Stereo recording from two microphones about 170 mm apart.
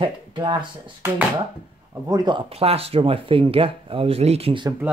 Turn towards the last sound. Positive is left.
turn(degrees=-30)  # may be behind; listen again after turning